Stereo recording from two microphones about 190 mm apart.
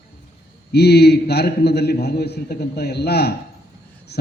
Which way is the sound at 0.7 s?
60° left (ahead or behind).